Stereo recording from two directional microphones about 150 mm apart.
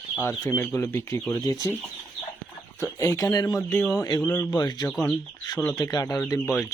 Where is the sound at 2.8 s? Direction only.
25° left (ahead or behind).